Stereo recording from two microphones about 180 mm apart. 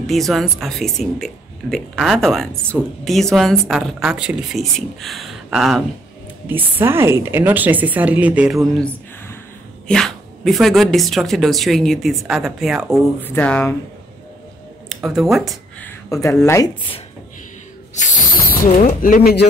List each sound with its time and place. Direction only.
0.0 s speech: centre (ahead or behind)
6.4 s a woman's voice: 10° right (ahead or behind)
9.8 s speech: centre (ahead or behind)
13.2 s speech: 10° left (ahead or behind)
15.0 s speech: centre (ahead or behind)
15.8 s speech: 15° left (ahead or behind)
17.9 s snake: 45° left (ahead or behind)
18.8 s speech: 50° left (ahead or behind)